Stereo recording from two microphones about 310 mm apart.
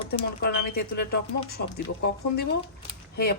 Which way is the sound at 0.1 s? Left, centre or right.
Left.